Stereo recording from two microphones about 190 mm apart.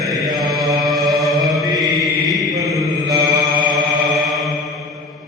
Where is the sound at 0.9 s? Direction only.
Centre (ahead or behind).